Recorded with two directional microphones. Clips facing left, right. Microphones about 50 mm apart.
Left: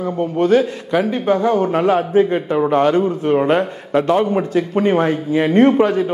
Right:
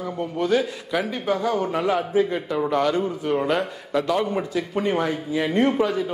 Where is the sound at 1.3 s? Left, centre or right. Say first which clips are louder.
Left 7 dB; left.